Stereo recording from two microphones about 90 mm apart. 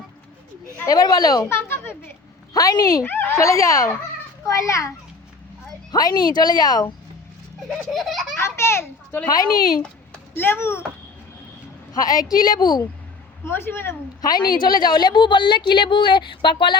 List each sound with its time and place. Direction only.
0.9 s speech: 45° left (ahead or behind)
1.5 s a child's voice: 25° left (ahead or behind)
2.5 s speech: 45° left (ahead or behind)
3.0 s a child's voice: 25° left (ahead or behind)
3.3 s speech: 35° left (ahead or behind)
5.9 s speech: 50° left (ahead or behind)
7.9 s speech: centre (ahead or behind)
8.4 s a child's voice: 30° left (ahead or behind)
9.3 s speech: 45° left (ahead or behind)
10.3 s a child's voice: 25° left (ahead or behind)
12.3 s speech: 50° left (ahead or behind)
13.4 s a child's voice: 25° left (ahead or behind)
14.2 s a woman's voice: 50° left (ahead or behind)